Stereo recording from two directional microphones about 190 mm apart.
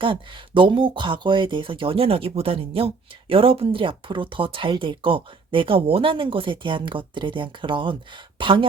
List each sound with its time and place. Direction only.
0.0 s speech: 25° right (ahead or behind)